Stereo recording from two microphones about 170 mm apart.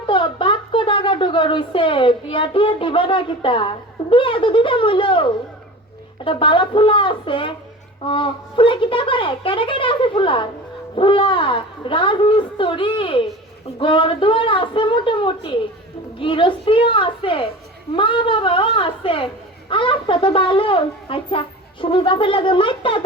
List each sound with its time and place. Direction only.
0.1 s a woman's voice: 30° left (ahead or behind)